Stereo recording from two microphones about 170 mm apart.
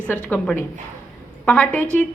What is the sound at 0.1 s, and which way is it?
A woman's voice, 10° left (ahead or behind).